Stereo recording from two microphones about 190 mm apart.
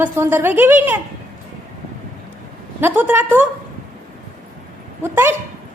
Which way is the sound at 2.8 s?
10° right (ahead or behind).